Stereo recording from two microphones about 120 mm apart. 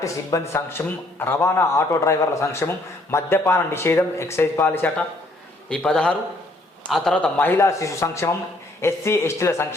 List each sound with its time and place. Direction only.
0.0 s a man's voice: 30° left (ahead or behind)
5.6 s a man's voice: 5° left (ahead or behind); by 9.6 s 25° left (ahead or behind)